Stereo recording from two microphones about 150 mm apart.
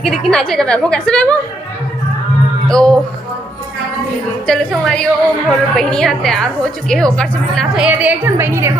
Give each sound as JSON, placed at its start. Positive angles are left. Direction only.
{"t": 0.0, "sound": "a woman's voice", "side_deg": 5}
{"t": 2.6, "sound": "a woman's voice", "side_deg": 5}
{"t": 4.4, "sound": "a woman's voice", "side_deg": 5}
{"t": 7.9, "sound": "a woman's voice", "side_deg": -10}